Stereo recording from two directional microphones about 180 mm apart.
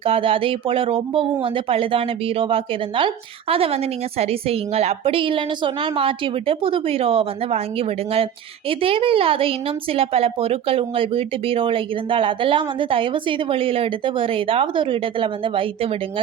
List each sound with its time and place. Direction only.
0.0 s a woman's voice: 30° right (ahead or behind)